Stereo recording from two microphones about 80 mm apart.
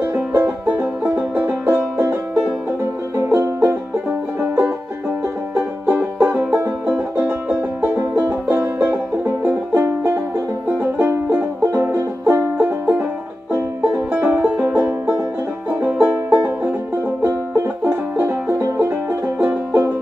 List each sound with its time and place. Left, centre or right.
0.0 s music: right
3.3 s music: right
7.2 s music: centre
9.8 s music: right
11.2 s music: right
14.1 s music: right
18.1 s music: right